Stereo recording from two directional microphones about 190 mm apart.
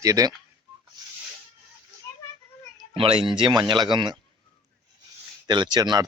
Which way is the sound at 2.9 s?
30° right (ahead or behind).